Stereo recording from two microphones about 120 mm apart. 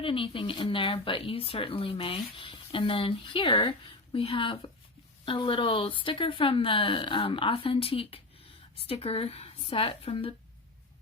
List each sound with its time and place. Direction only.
0.0 s speech: 45° left (ahead or behind)